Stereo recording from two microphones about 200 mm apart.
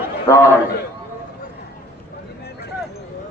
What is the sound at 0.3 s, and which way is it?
Speech, 15° left (ahead or behind).